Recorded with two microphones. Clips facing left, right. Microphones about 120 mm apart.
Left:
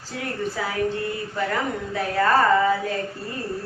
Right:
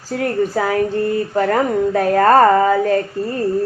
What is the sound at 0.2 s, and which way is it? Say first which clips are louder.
Speech: right 9 dB; 50° right (ahead or behind).